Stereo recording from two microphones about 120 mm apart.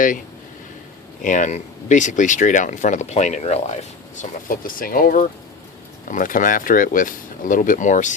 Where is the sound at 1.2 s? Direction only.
90° left.